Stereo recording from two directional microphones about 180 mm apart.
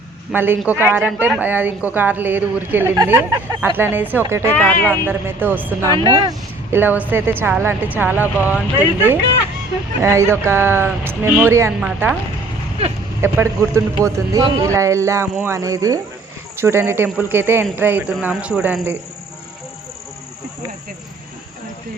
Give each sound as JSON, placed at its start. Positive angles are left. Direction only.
{"t": 0.3, "sound": "speech", "side_deg": -10}
{"t": 4.5, "sound": "speech", "side_deg": 10}
{"t": 5.0, "sound": "speech", "side_deg": -10}
{"t": 10.0, "sound": "speech", "side_deg": -15}
{"t": 13.2, "sound": "speech", "side_deg": -15}